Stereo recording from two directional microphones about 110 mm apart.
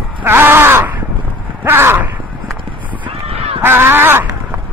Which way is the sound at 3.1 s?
60° right (ahead or behind).